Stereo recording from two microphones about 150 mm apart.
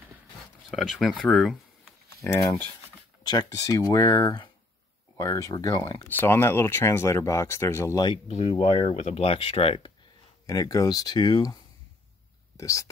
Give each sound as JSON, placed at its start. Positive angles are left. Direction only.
{"t": 0.7, "sound": "speech", "side_deg": 0}
{"t": 2.2, "sound": "speech", "side_deg": 20}
{"t": 6.0, "sound": "speech", "side_deg": 15}
{"t": 8.9, "sound": "speech", "side_deg": 45}
{"t": 10.4, "sound": "speech", "side_deg": 25}
{"t": 12.5, "sound": "speech", "side_deg": 20}